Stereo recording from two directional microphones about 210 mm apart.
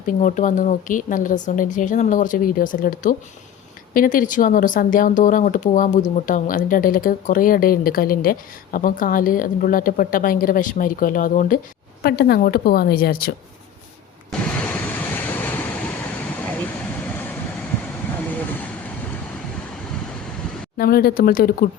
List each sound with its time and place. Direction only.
0.0 s a woman's voice: 40° left (ahead or behind)
14.3 s vehicle: 5° left (ahead or behind)
20.7 s a woman's voice: 45° left (ahead or behind)